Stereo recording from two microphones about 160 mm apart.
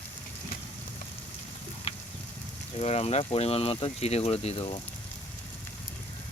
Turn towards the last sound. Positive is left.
turn(degrees=35)  # may be behind; listen again after turning